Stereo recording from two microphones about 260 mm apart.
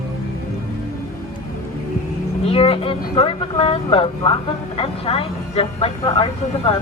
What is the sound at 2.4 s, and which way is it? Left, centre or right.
Speech, left.